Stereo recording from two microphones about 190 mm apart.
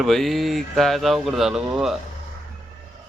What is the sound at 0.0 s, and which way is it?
Speech, centre (ahead or behind).